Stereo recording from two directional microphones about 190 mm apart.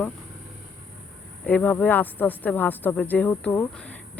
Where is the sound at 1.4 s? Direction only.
10° left (ahead or behind).